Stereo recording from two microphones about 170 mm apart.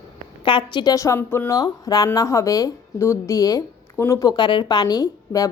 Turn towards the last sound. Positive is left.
turn(degrees=20)  # may be behind; listen again after turning